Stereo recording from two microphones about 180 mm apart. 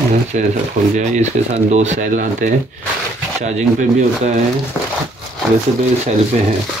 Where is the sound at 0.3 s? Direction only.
45° right (ahead or behind).